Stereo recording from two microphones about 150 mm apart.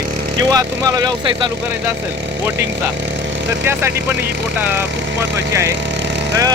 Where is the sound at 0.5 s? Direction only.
25° right (ahead or behind).